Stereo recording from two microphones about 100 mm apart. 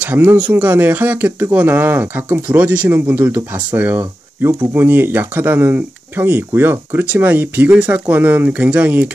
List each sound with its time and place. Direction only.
0.0 s speech: 15° right (ahead or behind)